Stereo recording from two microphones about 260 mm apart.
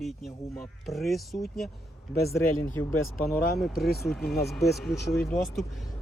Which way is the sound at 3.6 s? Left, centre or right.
Centre.